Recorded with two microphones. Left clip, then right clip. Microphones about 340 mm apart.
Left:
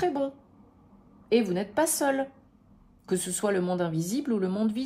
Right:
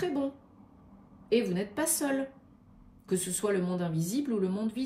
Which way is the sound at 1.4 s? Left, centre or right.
Left.